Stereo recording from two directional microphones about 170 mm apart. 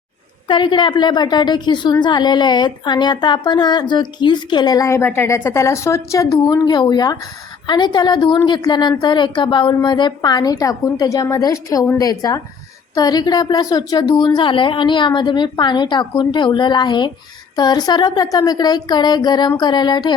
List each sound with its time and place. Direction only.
0.4 s a woman's voice: 30° left (ahead or behind)